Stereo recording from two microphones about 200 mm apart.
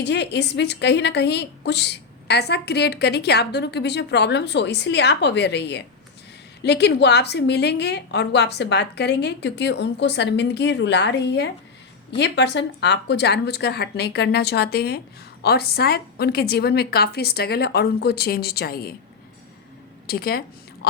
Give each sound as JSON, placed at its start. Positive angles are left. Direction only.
{"t": 0.0, "sound": "a woman's voice", "side_deg": 60}
{"t": 20.1, "sound": "a woman's voice", "side_deg": 50}